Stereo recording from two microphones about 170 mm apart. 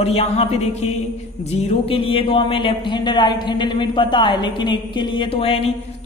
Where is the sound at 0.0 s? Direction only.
35° left (ahead or behind).